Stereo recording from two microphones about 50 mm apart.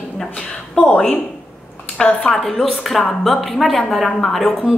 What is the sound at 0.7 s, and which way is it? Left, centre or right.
Speech, left.